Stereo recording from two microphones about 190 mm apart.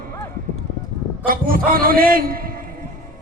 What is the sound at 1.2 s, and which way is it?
A man's voice, 50° right (ahead or behind).